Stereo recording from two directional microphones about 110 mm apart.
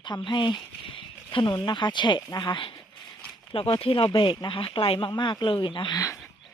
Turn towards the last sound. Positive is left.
turn(degrees=50)  # may be behind; listen again after turning